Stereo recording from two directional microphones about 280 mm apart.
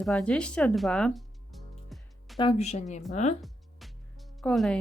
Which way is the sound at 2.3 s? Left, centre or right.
Left.